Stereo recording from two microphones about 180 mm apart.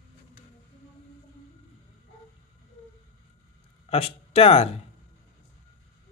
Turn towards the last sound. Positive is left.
turn(degrees=35)  # may be behind; listen again after turning